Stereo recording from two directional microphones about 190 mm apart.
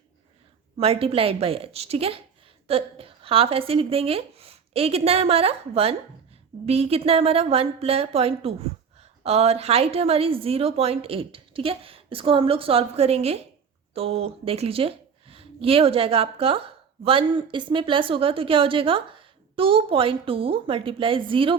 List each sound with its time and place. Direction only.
0.8 s a woman's voice: 30° right (ahead or behind)